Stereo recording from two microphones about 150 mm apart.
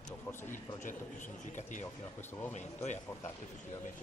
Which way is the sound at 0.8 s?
60° left (ahead or behind).